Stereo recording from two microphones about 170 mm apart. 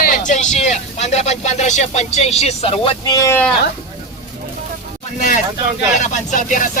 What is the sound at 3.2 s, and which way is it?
Speech, 15° left (ahead or behind).